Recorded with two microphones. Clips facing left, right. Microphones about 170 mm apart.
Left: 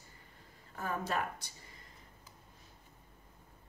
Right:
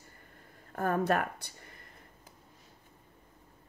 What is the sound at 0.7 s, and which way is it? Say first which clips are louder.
Speech: right 7 dB; 55° right (ahead or behind).